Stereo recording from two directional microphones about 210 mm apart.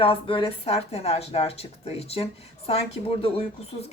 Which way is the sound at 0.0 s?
25° left (ahead or behind).